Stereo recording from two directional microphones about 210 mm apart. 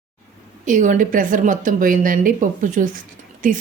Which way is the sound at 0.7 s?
35° right (ahead or behind).